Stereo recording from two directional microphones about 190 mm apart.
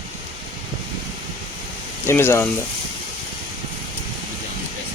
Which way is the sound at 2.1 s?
15° left (ahead or behind).